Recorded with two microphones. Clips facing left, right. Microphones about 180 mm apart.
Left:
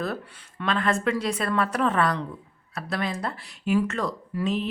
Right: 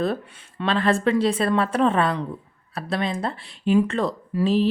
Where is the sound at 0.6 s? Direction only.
30° right (ahead or behind).